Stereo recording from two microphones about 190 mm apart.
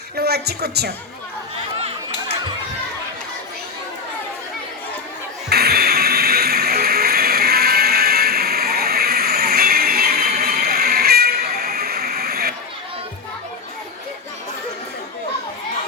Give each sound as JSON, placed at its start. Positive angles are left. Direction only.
{"t": 0.2, "sound": "a woman's voice", "side_deg": -60}
{"t": 5.5, "sound": "music", "side_deg": -55}